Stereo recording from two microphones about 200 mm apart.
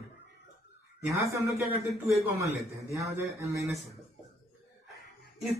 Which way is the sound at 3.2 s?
15° right (ahead or behind).